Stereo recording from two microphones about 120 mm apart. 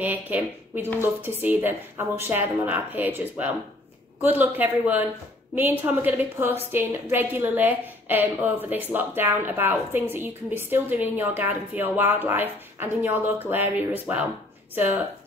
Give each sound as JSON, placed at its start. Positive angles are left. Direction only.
{"t": 0.0, "sound": "a woman's voice", "side_deg": -15}